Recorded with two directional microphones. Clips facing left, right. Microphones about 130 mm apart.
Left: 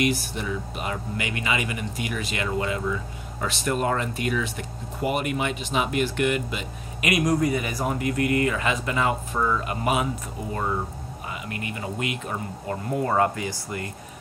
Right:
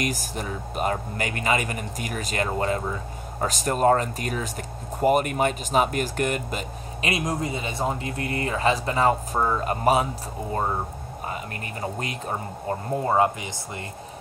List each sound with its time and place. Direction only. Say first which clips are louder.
0.0 s speech: left 3 dB; 45° right (ahead or behind)
7.1 s speech: left 5 dB; 25° right (ahead or behind)
11.2 s speech: even; 40° right (ahead or behind); by 13.8 s 20° right (ahead or behind)